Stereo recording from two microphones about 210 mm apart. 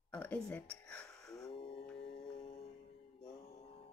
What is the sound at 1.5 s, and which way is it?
Mantra, 25° left (ahead or behind).